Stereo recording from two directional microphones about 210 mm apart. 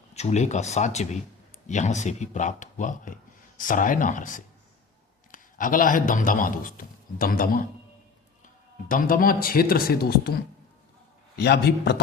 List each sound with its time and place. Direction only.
0.1 s a man's voice: 30° left (ahead or behind)
8.9 s speech: 40° left (ahead or behind)
11.3 s speech: 50° left (ahead or behind)